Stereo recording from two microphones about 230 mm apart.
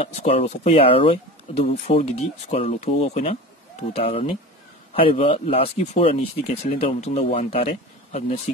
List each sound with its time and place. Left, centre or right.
0.0 s speech: left